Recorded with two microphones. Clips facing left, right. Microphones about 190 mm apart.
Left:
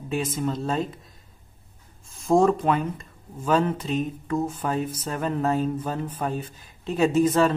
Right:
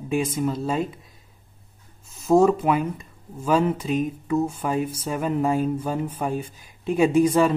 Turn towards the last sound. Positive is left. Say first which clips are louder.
# right 2 dB
turn(degrees=-10)  # may be behind; listen again after turning